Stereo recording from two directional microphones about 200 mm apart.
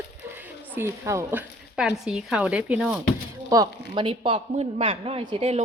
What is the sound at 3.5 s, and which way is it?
A man's voice, 20° right (ahead or behind).